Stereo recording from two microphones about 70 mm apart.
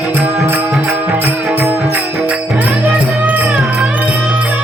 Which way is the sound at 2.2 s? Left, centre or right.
Right.